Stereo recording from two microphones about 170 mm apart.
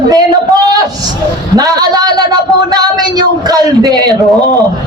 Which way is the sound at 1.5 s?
20° right (ahead or behind).